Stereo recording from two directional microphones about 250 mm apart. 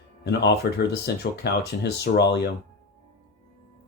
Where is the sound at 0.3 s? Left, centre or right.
Left.